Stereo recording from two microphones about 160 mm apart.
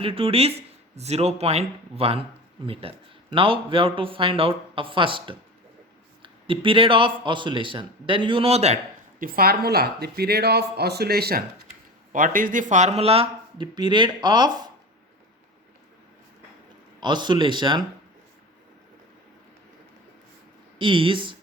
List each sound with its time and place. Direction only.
0.0 s a man's voice: 35° right (ahead or behind)
9.1 s speech: 65° right (ahead or behind)
12.1 s a man's voice: 55° right (ahead or behind); by 14.5 s 25° right (ahead or behind)
17.0 s speech: 30° right (ahead or behind)
20.7 s a man's voice: 30° right (ahead or behind)